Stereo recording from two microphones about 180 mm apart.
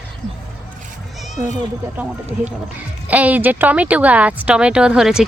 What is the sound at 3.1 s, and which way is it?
Speech, 10° right (ahead or behind).